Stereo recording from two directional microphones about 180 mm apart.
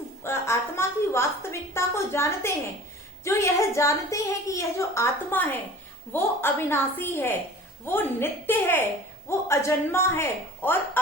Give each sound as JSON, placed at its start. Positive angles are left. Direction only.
{"t": 0.2, "sound": "a woman's voice", "side_deg": 15}